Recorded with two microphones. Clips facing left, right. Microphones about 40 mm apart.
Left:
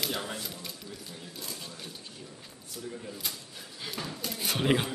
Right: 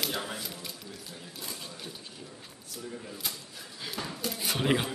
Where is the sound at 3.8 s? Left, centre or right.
Centre.